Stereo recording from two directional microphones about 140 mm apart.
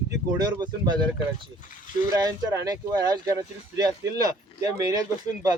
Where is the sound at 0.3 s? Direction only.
30° right (ahead or behind).